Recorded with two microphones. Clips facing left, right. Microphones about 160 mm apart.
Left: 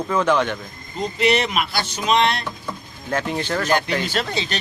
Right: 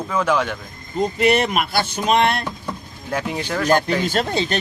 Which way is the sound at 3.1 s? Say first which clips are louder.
Left 1 dB; 5° right (ahead or behind).